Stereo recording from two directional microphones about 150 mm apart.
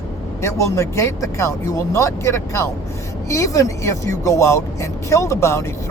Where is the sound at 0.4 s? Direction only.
20° left (ahead or behind).